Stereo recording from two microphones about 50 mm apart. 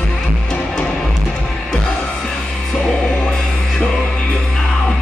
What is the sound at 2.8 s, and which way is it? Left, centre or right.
Music, centre.